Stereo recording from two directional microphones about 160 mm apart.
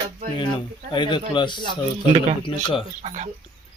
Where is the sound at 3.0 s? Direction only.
45° right (ahead or behind).